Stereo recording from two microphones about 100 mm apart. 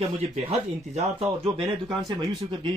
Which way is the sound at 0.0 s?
90° right.